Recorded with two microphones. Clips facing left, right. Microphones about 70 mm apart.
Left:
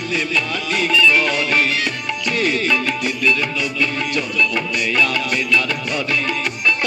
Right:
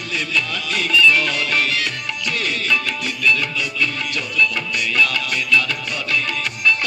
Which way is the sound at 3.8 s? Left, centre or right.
Left.